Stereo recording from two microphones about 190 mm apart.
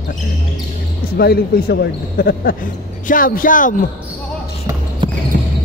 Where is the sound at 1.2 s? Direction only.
55° left (ahead or behind).